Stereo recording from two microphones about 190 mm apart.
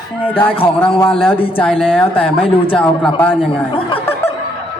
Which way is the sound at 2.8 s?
5° left (ahead or behind).